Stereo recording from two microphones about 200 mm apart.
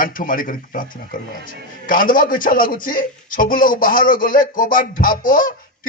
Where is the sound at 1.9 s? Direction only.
45° left (ahead or behind).